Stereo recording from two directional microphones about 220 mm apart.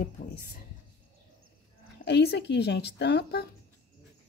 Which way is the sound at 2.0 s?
50° left (ahead or behind).